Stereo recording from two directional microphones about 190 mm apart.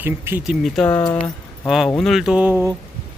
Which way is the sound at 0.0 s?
10° right (ahead or behind).